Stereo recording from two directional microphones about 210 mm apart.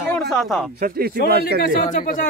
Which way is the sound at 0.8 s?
45° right (ahead or behind).